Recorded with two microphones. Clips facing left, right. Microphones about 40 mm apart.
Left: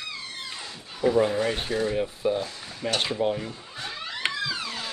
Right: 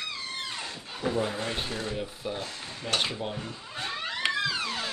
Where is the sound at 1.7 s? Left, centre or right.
Left.